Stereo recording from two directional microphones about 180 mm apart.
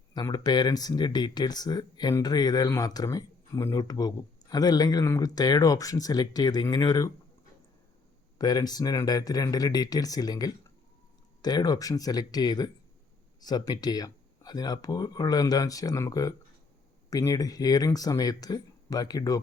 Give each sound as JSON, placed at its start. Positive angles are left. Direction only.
{"t": 0.1, "sound": "speech", "side_deg": 20}
{"t": 8.4, "sound": "speech", "side_deg": 20}